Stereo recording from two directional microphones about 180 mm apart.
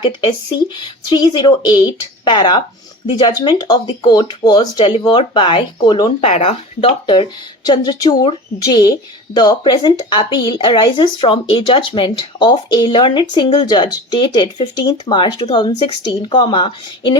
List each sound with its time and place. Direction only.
0.0 s speech: 25° left (ahead or behind)